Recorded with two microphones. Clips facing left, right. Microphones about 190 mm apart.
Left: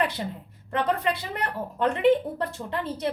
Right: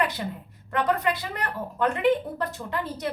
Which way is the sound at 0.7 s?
30° left (ahead or behind).